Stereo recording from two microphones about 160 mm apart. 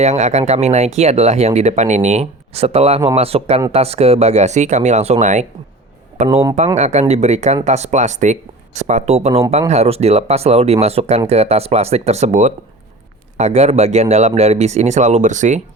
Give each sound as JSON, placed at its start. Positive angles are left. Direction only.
{"t": 0.0, "sound": "speech", "side_deg": -45}